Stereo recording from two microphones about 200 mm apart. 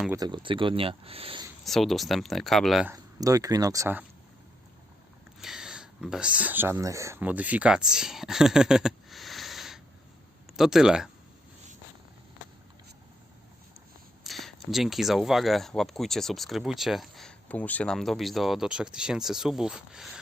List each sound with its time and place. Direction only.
0.2 s speech: 25° right (ahead or behind)
1.6 s speech: centre (ahead or behind)
2.9 s speech: 15° right (ahead or behind)
5.4 s speech: 5° right (ahead or behind)
14.3 s speech: centre (ahead or behind)